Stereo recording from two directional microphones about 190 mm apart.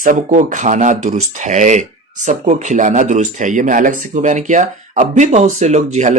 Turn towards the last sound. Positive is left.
turn(degrees=-40)  # may be behind; listen again after turning